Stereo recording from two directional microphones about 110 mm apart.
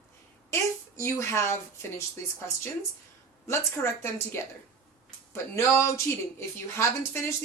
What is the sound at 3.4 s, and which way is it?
Speech, 25° left (ahead or behind).